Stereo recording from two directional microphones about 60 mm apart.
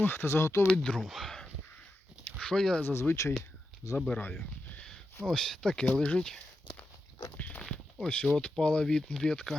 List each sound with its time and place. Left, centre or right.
0.0 s speech: left
0.7 s speech: centre
2.8 s speech: left
5.3 s speech: centre
7.3 s walk: left
8.0 s speech: centre